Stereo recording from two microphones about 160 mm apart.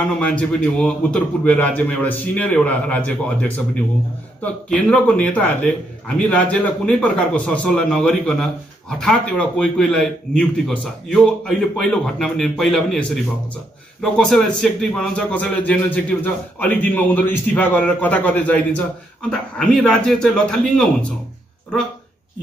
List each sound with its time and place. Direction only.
0.2 s a man's voice: 5° left (ahead or behind)
9.6 s a man's voice: 5° left (ahead or behind)